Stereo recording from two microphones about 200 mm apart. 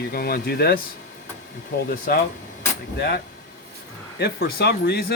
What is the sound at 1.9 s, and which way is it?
Speech, 50° left (ahead or behind).